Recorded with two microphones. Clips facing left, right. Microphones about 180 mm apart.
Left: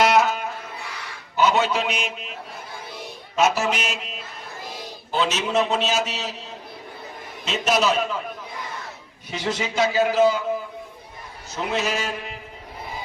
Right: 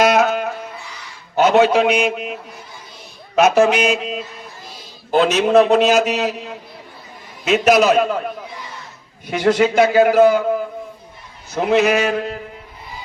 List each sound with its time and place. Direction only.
0.2 s music: 65° right (ahead or behind)
1.4 s a man's voice: 65° right (ahead or behind)
3.3 s a sound: 70° right (ahead or behind)
5.1 s a man's voice: 55° right (ahead or behind)
9.3 s a man's voice: 60° right (ahead or behind)
11.5 s a man's voice: 65° right (ahead or behind)